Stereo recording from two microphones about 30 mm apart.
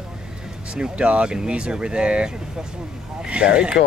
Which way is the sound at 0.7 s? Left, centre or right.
Right.